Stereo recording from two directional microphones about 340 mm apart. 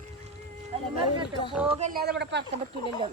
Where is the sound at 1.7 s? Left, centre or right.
Centre.